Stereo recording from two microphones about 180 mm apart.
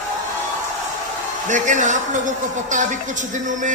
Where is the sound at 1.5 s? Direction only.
45° right (ahead or behind).